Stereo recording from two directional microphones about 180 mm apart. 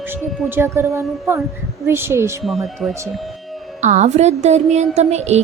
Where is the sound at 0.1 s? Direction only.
10° right (ahead or behind).